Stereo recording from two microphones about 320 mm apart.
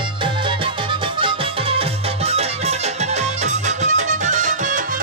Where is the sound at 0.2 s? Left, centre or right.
Centre.